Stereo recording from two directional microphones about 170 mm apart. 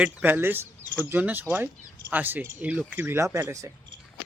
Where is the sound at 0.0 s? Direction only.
10° right (ahead or behind).